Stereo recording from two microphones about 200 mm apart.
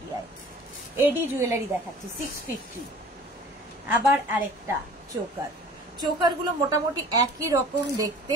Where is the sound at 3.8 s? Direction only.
10° right (ahead or behind).